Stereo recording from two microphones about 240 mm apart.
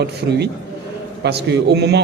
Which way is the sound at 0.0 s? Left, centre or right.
Right.